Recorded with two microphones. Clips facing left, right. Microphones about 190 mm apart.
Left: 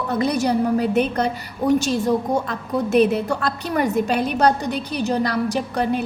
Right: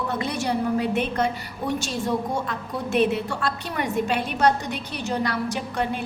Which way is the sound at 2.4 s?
40° left (ahead or behind).